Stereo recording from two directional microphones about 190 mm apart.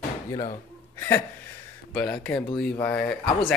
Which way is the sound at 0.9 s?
10° left (ahead or behind).